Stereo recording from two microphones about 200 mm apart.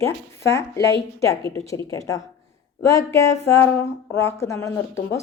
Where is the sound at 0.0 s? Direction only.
15° left (ahead or behind).